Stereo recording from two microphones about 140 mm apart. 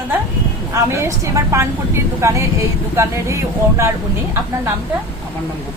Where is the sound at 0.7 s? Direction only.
20° right (ahead or behind).